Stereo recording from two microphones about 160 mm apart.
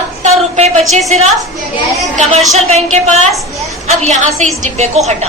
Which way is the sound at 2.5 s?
45° right (ahead or behind).